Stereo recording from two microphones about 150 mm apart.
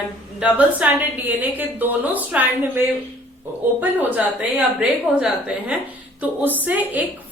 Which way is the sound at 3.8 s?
10° right (ahead or behind).